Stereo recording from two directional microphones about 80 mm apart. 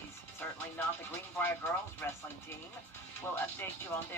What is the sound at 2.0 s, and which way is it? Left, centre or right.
Speech, left.